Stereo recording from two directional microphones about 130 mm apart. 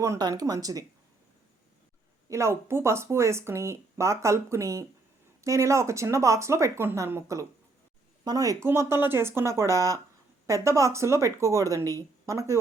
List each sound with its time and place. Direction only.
0.0 s speech: 25° right (ahead or behind)
2.3 s speech: 20° right (ahead or behind)